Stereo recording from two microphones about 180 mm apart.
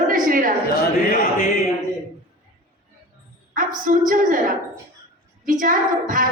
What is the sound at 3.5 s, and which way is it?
Speech, 50° right (ahead or behind).